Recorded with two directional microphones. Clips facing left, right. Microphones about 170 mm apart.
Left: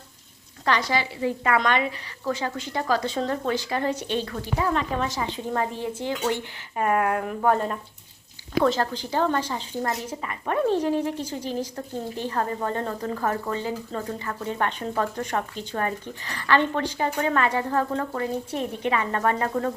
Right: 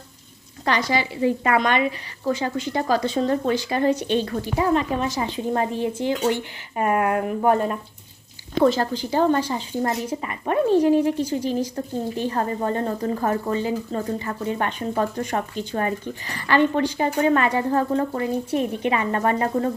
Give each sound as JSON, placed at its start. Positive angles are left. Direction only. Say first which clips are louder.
{"t": 0.6, "sound": "a woman's voice", "louder": "right 2 dB", "side_deg": -15}